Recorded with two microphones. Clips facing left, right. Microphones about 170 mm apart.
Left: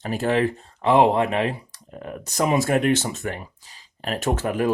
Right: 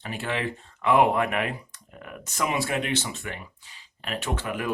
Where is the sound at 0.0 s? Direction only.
40° left (ahead or behind).